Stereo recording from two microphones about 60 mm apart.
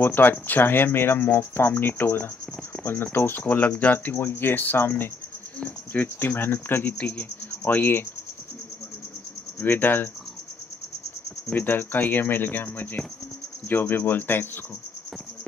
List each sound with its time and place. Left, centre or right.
0.0 s speech: left
3.4 s speech: left
9.6 s speech: left
11.5 s speech: left